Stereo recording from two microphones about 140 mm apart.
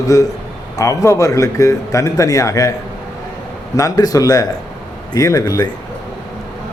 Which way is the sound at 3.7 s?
25° left (ahead or behind).